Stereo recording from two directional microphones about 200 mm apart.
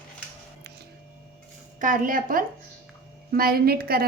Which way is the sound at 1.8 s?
40° right (ahead or behind).